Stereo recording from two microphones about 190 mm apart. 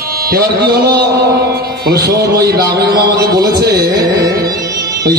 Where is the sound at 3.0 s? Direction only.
55° right (ahead or behind).